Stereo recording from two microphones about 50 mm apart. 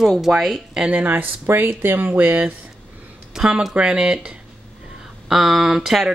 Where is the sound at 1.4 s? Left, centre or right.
Right.